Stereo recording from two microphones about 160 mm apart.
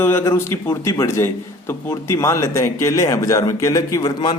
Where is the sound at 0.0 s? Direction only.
15° left (ahead or behind).